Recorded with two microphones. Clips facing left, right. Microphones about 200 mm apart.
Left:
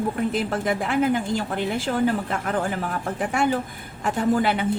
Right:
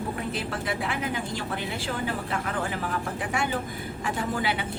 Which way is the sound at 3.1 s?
45° left (ahead or behind).